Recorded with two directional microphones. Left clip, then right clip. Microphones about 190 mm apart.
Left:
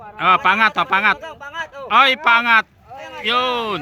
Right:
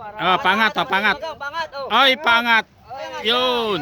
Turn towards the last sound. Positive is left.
turn(degrees=-20)  # may be behind; listen again after turning